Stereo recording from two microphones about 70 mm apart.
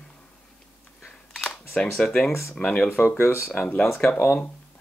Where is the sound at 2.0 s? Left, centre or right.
Centre.